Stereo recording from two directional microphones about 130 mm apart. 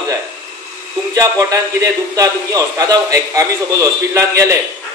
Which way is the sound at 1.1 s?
25° right (ahead or behind).